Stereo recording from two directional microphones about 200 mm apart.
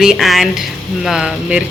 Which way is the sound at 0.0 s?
Centre (ahead or behind).